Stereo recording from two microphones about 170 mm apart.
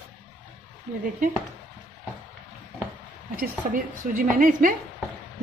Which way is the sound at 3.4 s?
55° right (ahead or behind).